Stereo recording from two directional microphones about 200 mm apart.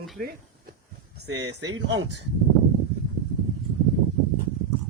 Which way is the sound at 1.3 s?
80° right.